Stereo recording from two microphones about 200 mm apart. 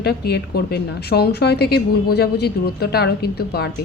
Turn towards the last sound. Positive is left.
turn(degrees=50)  # may be behind; listen again after turning